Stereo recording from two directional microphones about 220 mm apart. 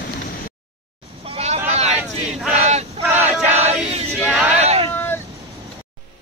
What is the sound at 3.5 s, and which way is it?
Choir, 30° right (ahead or behind).